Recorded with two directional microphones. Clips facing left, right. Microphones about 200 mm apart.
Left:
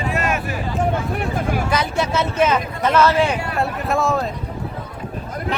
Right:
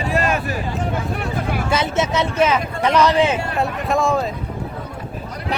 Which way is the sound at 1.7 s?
25° right (ahead or behind).